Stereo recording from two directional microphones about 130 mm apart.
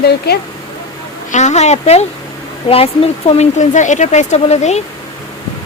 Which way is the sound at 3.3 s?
65° left (ahead or behind).